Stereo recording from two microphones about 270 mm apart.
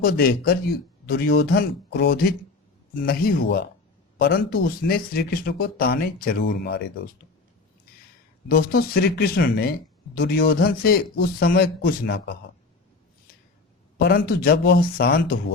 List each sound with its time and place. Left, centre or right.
0.0 s speech: left
8.4 s speech: left
14.0 s speech: left